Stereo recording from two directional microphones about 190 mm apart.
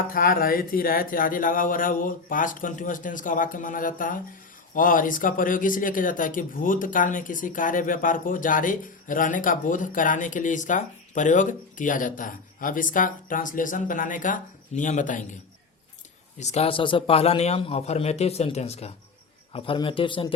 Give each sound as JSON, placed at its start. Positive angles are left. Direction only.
{"t": 0.1, "sound": "speech", "side_deg": 50}
{"t": 16.4, "sound": "a man's voice", "side_deg": 35}